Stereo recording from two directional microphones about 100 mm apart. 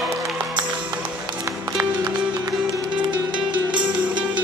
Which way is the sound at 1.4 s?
30° right (ahead or behind).